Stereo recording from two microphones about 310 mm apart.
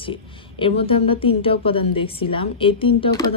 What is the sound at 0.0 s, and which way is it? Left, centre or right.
Speech, centre.